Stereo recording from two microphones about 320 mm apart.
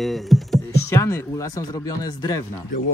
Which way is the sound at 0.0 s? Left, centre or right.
Centre.